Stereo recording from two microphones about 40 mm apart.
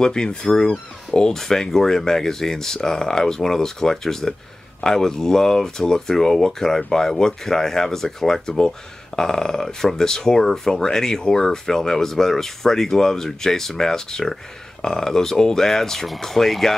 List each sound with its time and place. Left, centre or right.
0.0 s speech: left